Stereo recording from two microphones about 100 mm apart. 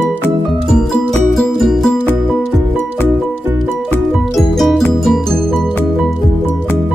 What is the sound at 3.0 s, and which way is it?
Music, 20° right (ahead or behind).